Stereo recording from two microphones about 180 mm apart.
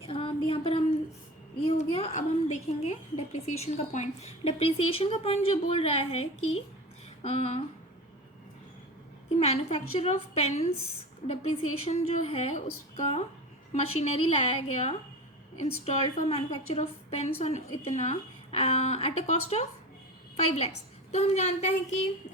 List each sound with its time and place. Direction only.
0.0 s a sound: 30° left (ahead or behind)
1.6 s a woman's voice: 35° left (ahead or behind)
9.4 s a woman's voice: 35° left (ahead or behind)
21.1 s a woman's voice: 40° left (ahead or behind)